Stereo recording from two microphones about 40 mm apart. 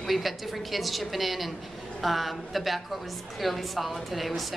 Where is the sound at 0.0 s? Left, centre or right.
Centre.